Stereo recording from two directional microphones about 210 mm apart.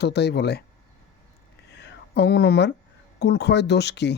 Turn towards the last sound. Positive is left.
turn(degrees=55)  # may be behind; listen again after turning